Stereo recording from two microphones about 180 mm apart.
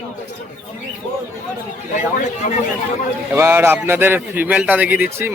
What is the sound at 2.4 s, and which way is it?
Speech, 45° left (ahead or behind).